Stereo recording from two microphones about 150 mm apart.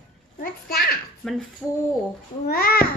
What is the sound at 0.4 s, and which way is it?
Speech, 90° left.